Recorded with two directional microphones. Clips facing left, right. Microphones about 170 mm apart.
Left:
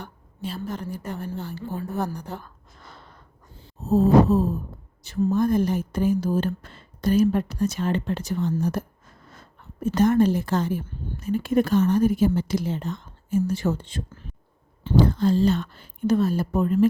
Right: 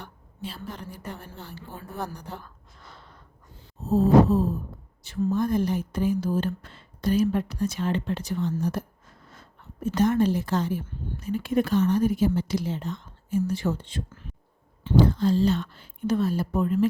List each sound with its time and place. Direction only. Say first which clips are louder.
0.0 s a woman's voice: left 4 dB; 45° left (ahead or behind)
9.8 s a woman's voice: left 3 dB; 50° left (ahead or behind)